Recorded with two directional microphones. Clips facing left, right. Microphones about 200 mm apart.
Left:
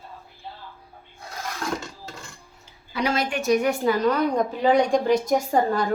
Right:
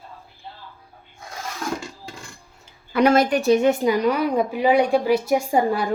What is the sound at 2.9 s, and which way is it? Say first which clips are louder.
A woman's voice: right 8 dB; 50° right (ahead or behind).